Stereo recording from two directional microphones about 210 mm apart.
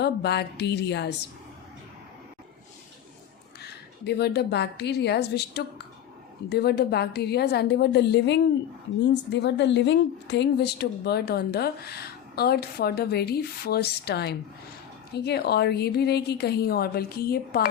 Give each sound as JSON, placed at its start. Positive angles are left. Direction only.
{"t": 0.0, "sound": "a woman's voice", "side_deg": 50}
{"t": 3.6, "sound": "a woman's voice", "side_deg": 50}